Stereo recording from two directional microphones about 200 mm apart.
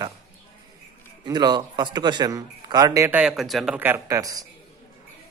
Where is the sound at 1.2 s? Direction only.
20° right (ahead or behind).